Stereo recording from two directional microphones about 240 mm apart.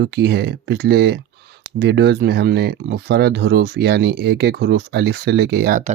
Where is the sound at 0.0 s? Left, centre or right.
Right.